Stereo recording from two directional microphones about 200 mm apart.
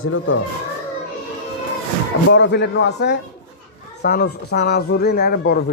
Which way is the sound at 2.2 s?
60° left (ahead or behind).